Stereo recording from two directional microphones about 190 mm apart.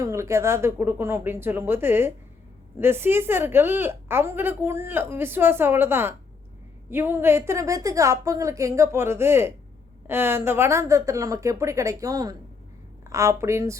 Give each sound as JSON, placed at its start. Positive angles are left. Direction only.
{"t": 0.0, "sound": "a woman's voice", "side_deg": -15}